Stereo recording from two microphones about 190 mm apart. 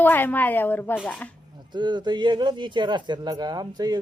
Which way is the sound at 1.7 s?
25° right (ahead or behind).